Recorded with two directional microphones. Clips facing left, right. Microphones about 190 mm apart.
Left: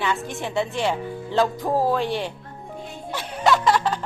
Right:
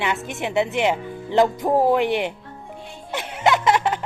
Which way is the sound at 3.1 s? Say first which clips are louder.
Right 1 dB; 20° right (ahead or behind).